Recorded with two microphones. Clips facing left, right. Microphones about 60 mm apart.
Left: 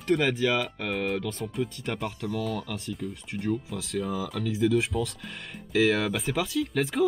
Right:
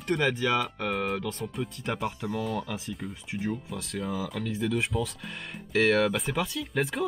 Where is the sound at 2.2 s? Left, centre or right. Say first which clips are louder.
Left 1 dB; centre.